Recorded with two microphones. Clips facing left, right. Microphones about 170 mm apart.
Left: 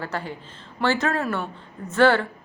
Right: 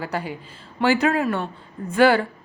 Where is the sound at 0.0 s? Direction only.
15° right (ahead or behind).